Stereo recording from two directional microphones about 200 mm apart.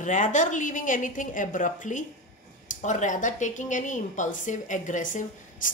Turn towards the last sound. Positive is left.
turn(degrees=40)  # may be behind; listen again after turning